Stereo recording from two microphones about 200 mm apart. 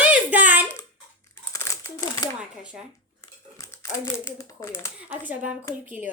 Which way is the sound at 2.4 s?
5° right (ahead or behind).